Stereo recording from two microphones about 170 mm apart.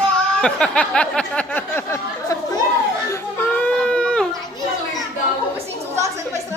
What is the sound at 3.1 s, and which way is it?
Baby cry, 10° left (ahead or behind).